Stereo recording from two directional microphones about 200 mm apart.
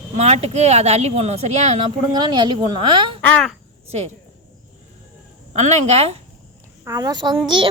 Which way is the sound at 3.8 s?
35° right (ahead or behind).